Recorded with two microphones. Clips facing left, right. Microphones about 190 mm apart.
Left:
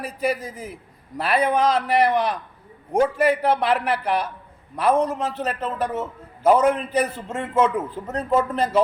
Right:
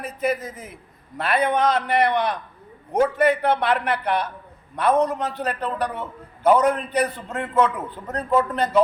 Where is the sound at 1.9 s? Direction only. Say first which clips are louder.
Left 1 dB; 10° left (ahead or behind).